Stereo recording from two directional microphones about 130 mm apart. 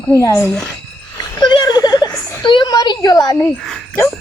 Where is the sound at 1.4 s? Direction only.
35° left (ahead or behind).